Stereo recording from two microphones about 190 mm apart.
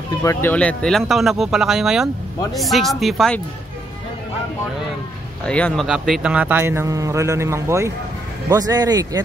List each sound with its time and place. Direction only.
0.2 s speech: 15° left (ahead or behind)
5.4 s a man's voice: 5° left (ahead or behind); by 9.2 s 20° right (ahead or behind)